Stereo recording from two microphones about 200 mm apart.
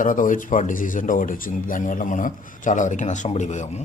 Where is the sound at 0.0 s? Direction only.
40° left (ahead or behind).